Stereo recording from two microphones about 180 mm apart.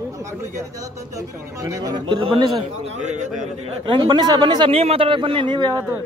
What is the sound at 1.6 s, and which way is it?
Speech, 20° right (ahead or behind).